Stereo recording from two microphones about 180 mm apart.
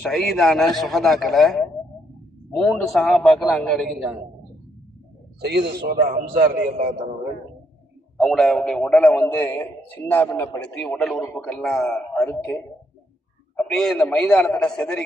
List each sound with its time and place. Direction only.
0.1 s a man's voice: centre (ahead or behind)
2.9 s a man's voice: centre (ahead or behind)
5.4 s a man's voice: 65° right (ahead or behind); by 7.1 s 35° right (ahead or behind)
8.2 s a man's voice: 5° left (ahead or behind)
13.6 s a man's voice: centre (ahead or behind)